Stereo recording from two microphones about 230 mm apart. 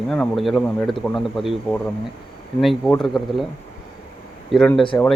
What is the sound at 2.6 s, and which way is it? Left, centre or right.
Speech, centre.